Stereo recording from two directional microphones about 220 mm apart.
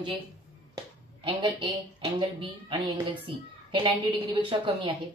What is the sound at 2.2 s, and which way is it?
A woman's voice, 25° right (ahead or behind).